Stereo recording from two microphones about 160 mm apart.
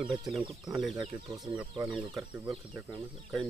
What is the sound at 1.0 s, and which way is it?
Speech, 30° right (ahead or behind).